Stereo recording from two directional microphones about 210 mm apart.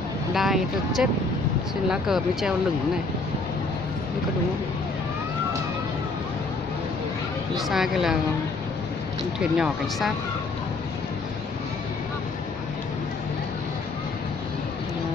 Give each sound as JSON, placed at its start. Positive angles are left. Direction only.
{"t": 0.3, "sound": "speech", "side_deg": 0}
{"t": 7.5, "sound": "speech", "side_deg": 0}
{"t": 9.4, "sound": "speech", "side_deg": 0}